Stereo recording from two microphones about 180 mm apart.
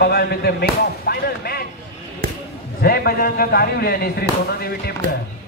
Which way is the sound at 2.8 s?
60° left (ahead or behind).